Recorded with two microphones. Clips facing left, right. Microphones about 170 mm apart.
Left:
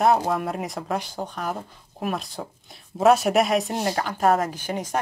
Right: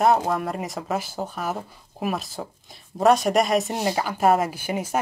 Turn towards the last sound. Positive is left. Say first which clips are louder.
# right 1 dB
turn(degrees=-10)  # may be behind; listen again after turning